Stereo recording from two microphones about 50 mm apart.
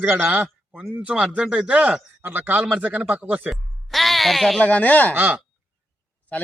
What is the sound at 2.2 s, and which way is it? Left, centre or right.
Speech, right.